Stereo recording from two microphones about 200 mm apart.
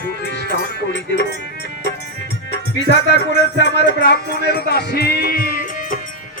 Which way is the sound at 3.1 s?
60° left (ahead or behind).